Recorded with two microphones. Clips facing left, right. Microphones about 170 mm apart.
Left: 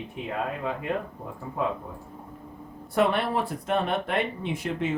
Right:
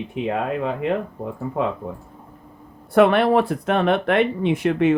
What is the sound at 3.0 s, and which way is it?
Speech, 70° right (ahead or behind).